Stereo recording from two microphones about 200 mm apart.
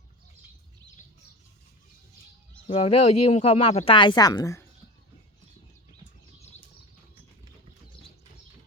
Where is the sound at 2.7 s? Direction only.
30° left (ahead or behind).